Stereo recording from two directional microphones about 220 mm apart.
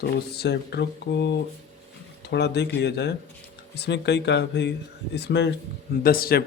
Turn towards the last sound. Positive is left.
turn(degrees=45)  # may be behind; listen again after turning